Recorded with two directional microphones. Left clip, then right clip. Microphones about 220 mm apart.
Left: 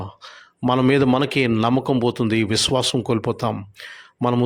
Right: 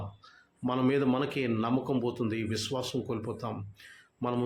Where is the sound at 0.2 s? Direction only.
45° left (ahead or behind).